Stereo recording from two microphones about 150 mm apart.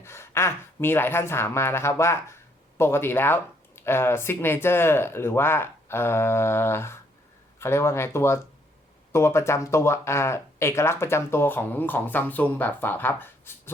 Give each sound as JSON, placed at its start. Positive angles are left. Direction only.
{"t": 0.0, "sound": "a woman's voice", "side_deg": 15}